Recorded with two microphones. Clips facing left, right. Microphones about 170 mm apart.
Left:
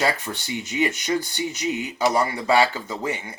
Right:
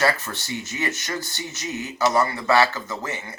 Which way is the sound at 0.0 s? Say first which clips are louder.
Right 1 dB; 15° left (ahead or behind).